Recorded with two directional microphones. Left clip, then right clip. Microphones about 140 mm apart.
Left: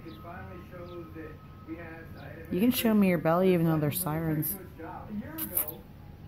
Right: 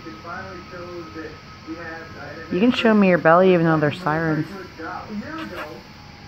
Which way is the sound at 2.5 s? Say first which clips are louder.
Right 10 dB; 25° left (ahead or behind).